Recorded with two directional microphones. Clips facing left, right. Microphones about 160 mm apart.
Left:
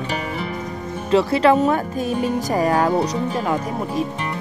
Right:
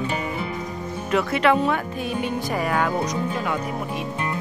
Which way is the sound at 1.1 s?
30° left (ahead or behind).